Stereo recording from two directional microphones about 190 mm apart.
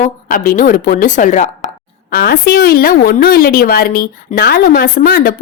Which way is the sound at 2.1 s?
55° left (ahead or behind).